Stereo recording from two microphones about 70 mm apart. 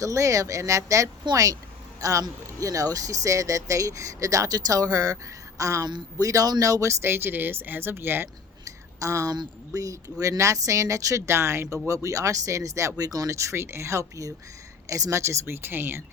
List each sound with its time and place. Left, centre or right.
0.0 s speech: right
1.2 s speech: right
8.6 s a sound: right
9.7 s speech: right